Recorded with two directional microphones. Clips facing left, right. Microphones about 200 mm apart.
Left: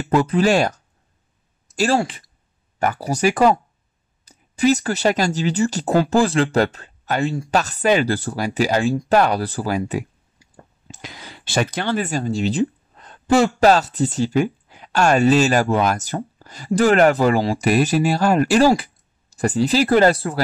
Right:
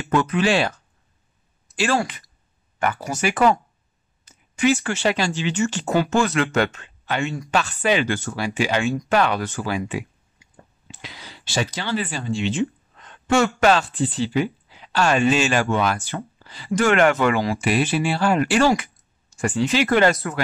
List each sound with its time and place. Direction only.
0.0 s speech: 35° left (ahead or behind)
1.8 s speech: 30° left (ahead or behind)